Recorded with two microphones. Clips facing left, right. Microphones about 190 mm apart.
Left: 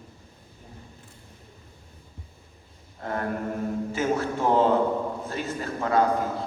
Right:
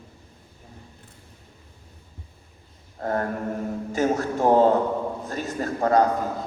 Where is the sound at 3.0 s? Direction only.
40° right (ahead or behind).